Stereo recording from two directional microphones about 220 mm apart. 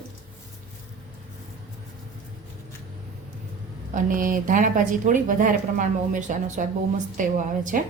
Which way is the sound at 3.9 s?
35° right (ahead or behind).